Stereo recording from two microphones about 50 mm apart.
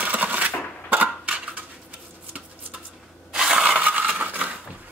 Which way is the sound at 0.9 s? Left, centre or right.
Right.